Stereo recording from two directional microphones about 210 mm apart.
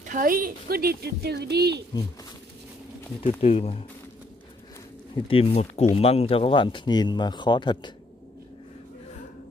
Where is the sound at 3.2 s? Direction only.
25° left (ahead or behind).